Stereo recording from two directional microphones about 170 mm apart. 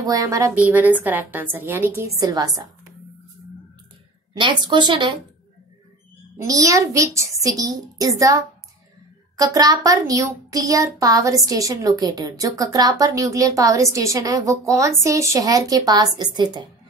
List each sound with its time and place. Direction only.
0.0 s a woman's voice: 20° right (ahead or behind)
4.4 s a woman's voice: 25° right (ahead or behind)
6.3 s a woman's voice: 20° right (ahead or behind)
9.4 s a woman's voice: 20° right (ahead or behind)